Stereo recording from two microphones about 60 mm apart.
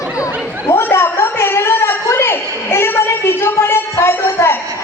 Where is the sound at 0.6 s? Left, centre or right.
Left.